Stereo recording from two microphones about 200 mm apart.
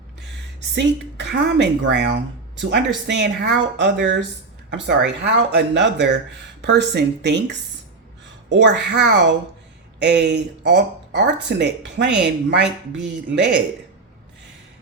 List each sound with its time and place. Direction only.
0.8 s speech: 60° right (ahead or behind)